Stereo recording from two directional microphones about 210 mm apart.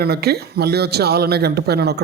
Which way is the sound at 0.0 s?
50° right (ahead or behind).